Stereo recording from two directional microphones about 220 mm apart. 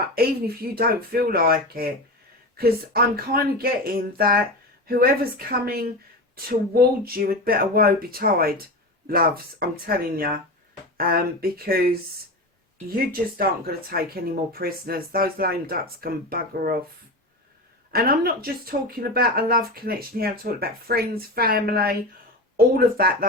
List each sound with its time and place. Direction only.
0.1 s speech: 45° right (ahead or behind)
17.9 s speech: 45° right (ahead or behind)